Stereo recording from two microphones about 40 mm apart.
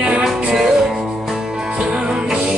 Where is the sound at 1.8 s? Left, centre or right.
Centre.